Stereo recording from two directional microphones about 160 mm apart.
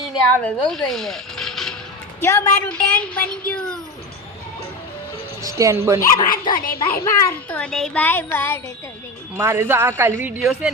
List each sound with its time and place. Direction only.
0.0 s speech: 5° left (ahead or behind)
2.2 s a child's voice: 20° left (ahead or behind)
2.6 s speech: 5° left (ahead or behind)
5.4 s speech: 20° right (ahead or behind)
6.3 s speech: 60° left (ahead or behind)
7.0 s a child's voice: 20° left (ahead or behind)
7.5 s speech: 5° left (ahead or behind)
9.4 s a woman's voice: 15° right (ahead or behind)